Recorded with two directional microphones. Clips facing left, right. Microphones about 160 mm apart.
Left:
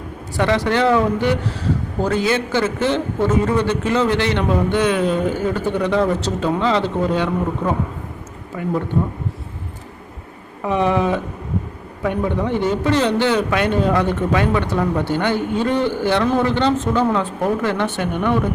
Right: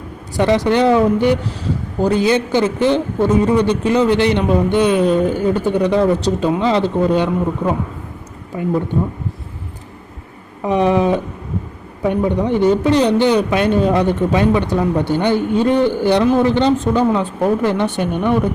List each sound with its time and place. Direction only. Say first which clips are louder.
0.3 s a man's voice: right 4 dB; 15° right (ahead or behind)
10.6 s a man's voice: right 3 dB; 20° right (ahead or behind)